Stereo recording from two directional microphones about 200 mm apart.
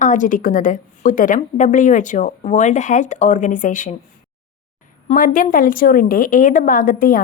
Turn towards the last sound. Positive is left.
turn(degrees=45)  # may be behind; listen again after turning